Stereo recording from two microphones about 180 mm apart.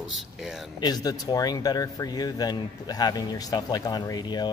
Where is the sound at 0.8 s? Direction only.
20° left (ahead or behind).